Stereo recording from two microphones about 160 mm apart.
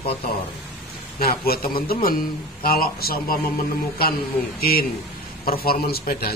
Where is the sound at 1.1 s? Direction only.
70° left (ahead or behind).